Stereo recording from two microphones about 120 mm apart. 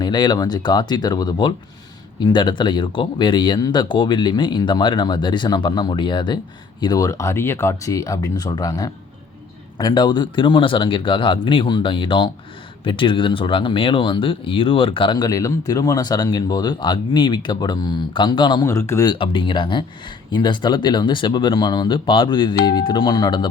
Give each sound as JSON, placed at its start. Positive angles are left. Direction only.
{"t": 0.0, "sound": "speech", "side_deg": 40}
{"t": 18.6, "sound": "speech", "side_deg": 25}
{"t": 19.1, "sound": "speech", "side_deg": 45}